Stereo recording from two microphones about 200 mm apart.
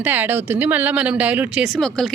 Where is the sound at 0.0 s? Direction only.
10° right (ahead or behind).